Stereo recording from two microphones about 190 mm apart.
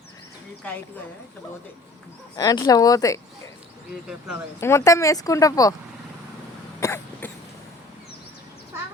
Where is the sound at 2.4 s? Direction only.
20° left (ahead or behind).